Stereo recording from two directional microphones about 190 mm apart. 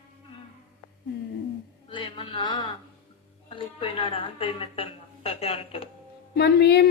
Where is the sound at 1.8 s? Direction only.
25° left (ahead or behind).